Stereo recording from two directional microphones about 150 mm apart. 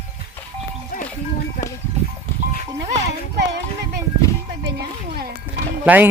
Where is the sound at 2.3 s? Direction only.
15° left (ahead or behind).